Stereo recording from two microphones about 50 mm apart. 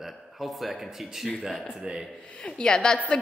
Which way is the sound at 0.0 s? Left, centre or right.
Centre.